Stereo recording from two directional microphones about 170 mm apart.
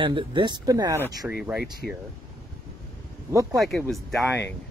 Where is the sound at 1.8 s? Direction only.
5° left (ahead or behind).